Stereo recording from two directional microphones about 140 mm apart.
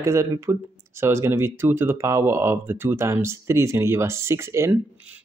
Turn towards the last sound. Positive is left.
turn(degrees=-20)  # may be behind; listen again after turning